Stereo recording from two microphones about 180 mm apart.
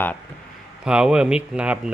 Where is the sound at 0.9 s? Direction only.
5° right (ahead or behind).